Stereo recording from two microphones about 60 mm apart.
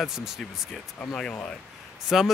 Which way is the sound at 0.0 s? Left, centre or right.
Centre.